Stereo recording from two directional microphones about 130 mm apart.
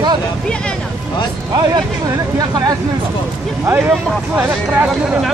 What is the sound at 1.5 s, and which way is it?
Speech, 25° right (ahead or behind).